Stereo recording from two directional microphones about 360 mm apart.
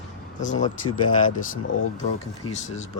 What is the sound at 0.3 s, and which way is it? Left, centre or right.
Speech, left.